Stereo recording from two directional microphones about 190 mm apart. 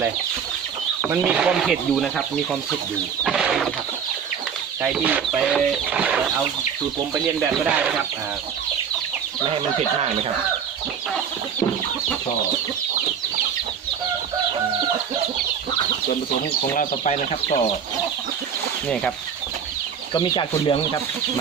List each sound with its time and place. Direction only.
1.0 s speech: 10° right (ahead or behind)
3.2 s bird: centre (ahead or behind)
4.8 s speech: 10° right (ahead or behind)
16.7 s speech: 35° left (ahead or behind)
20.1 s speech: 25° left (ahead or behind)